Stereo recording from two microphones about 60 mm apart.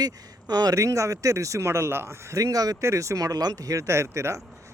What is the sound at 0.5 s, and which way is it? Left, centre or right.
Speech, right.